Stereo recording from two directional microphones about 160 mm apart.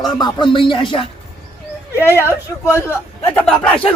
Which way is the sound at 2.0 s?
15° left (ahead or behind).